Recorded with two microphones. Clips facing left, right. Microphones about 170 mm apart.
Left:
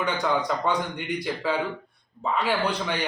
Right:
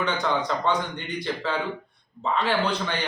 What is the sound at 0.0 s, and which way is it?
A man's voice, 10° left (ahead or behind).